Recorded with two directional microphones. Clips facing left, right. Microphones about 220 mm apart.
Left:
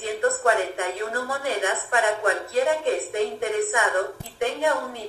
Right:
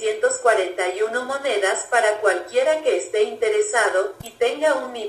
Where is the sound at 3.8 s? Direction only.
40° right (ahead or behind).